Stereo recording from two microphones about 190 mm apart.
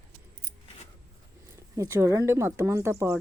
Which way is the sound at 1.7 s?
15° right (ahead or behind).